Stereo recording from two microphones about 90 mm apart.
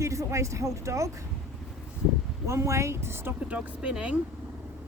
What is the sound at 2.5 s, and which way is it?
Speech, 30° right (ahead or behind).